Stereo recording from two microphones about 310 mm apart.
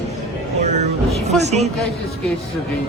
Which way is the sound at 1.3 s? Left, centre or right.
Right.